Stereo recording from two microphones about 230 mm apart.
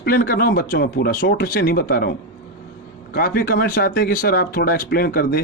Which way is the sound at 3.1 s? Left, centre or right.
Left.